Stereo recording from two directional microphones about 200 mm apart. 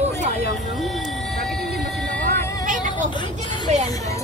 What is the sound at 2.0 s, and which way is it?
Music, 5° left (ahead or behind).